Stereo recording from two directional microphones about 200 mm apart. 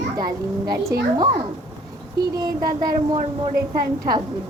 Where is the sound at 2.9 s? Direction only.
35° right (ahead or behind).